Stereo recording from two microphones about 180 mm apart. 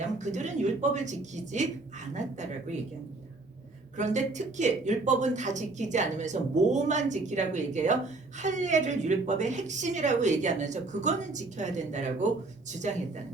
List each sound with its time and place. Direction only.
0.2 s speech: 40° right (ahead or behind)
3.9 s speech: 40° right (ahead or behind)